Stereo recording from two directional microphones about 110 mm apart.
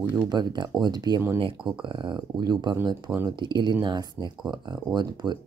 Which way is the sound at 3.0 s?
20° right (ahead or behind).